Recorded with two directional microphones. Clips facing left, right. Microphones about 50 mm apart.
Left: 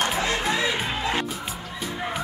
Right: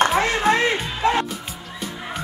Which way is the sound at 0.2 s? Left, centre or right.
Right.